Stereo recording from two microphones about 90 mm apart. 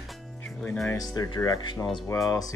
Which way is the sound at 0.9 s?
40° left (ahead or behind).